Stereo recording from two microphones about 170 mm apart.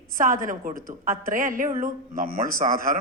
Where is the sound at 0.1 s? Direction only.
55° right (ahead or behind).